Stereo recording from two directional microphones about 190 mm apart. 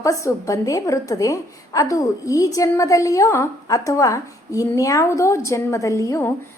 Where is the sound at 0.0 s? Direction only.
15° left (ahead or behind).